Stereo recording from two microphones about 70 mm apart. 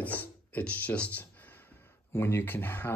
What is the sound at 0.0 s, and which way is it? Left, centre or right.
Speech, left.